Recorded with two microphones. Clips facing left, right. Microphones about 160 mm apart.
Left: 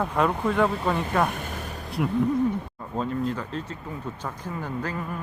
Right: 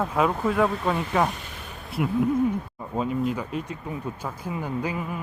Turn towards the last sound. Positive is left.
turn(degrees=-10)  # may be behind; listen again after turning